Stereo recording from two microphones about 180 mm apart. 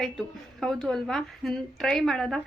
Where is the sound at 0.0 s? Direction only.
Centre (ahead or behind).